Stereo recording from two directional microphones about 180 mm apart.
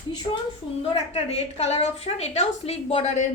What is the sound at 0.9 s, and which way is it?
A woman's voice, 35° left (ahead or behind).